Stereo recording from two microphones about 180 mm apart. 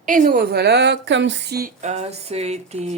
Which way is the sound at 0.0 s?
45° right (ahead or behind).